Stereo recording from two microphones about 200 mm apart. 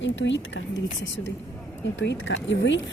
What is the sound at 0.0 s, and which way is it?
Speech, 65° left (ahead or behind).